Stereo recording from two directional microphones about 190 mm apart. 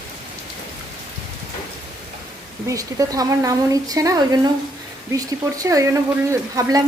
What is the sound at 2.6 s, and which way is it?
A woman's voice, 20° right (ahead or behind).